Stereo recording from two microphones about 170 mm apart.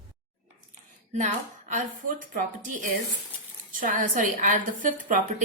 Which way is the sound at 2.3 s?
50° right (ahead or behind).